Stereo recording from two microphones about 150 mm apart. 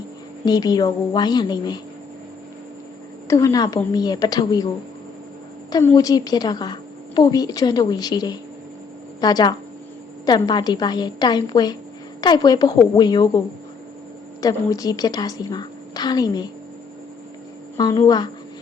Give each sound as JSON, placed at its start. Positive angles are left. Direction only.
{"t": 0.4, "sound": "a woman's voice", "side_deg": 25}
{"t": 3.2, "sound": "a woman's voice", "side_deg": 25}
{"t": 5.8, "sound": "a woman's voice", "side_deg": 20}
{"t": 14.4, "sound": "a woman's voice", "side_deg": 25}
{"t": 17.7, "sound": "a woman's voice", "side_deg": 25}